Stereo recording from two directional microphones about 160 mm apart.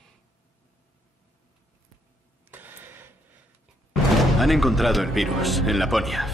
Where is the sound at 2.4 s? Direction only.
10° right (ahead or behind).